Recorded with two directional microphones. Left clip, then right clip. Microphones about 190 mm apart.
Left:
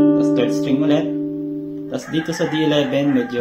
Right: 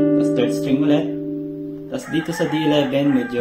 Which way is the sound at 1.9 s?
15° left (ahead or behind).